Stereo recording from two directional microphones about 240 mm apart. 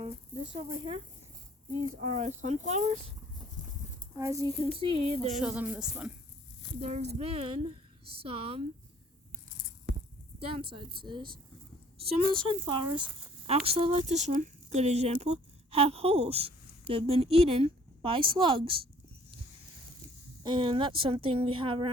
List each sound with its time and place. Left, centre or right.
2.0 s a woman's voice: right
4.2 s a woman's voice: centre
5.3 s speech: centre
6.7 s a woman's voice: right
10.4 s a woman's voice: right
20.4 s a woman's voice: centre